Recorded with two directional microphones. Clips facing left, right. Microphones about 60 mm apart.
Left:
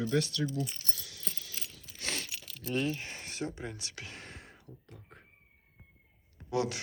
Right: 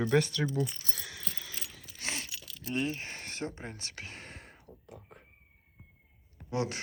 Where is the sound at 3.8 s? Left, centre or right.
Right.